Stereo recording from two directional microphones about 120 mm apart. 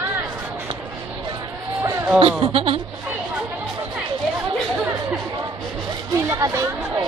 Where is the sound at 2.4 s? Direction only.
50° right (ahead or behind).